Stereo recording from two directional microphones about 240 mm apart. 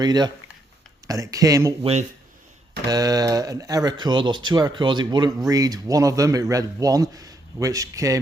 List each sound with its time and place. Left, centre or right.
0.0 s a man's voice: centre